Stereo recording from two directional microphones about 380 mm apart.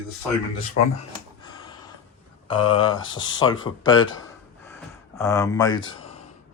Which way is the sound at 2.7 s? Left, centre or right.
Centre.